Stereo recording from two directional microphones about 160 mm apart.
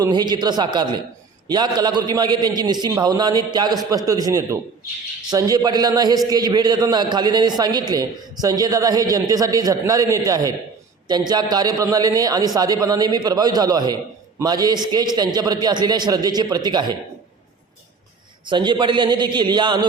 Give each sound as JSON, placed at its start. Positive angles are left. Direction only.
{"t": 0.0, "sound": "a man's voice", "side_deg": -25}
{"t": 18.4, "sound": "a man's voice", "side_deg": -30}